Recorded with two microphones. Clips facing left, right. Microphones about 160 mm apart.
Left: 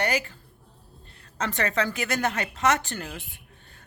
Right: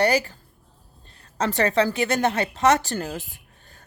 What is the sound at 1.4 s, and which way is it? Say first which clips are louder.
Speech: right 6 dB; 35° right (ahead or behind).